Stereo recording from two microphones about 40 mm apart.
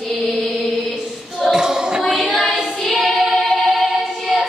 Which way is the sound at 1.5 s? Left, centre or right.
Centre.